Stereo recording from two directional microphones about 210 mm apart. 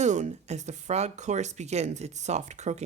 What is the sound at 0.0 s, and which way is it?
Speech, 35° right (ahead or behind).